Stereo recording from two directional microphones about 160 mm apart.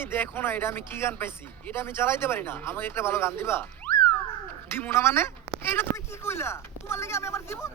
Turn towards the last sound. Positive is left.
turn(degrees=15)  # may be behind; listen again after turning